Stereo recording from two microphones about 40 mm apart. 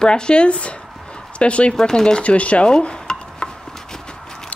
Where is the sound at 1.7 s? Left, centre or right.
Centre.